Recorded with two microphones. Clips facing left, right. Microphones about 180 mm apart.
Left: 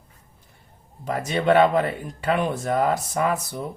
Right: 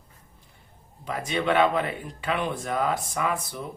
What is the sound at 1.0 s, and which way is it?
Speech, 40° left (ahead or behind).